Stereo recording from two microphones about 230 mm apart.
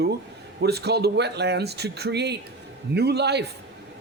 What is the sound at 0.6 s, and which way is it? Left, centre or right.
Speech, right.